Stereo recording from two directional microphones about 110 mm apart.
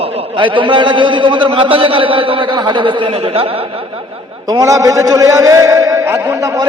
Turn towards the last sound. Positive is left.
turn(degrees=-30)  # may be behind; listen again after turning